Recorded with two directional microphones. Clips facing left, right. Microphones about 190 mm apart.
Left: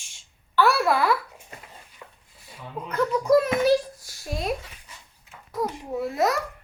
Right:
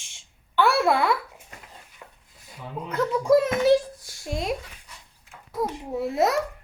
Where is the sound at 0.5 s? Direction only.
25° right (ahead or behind).